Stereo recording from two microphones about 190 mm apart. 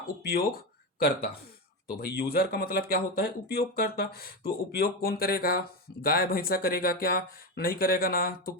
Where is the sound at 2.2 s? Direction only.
55° left (ahead or behind).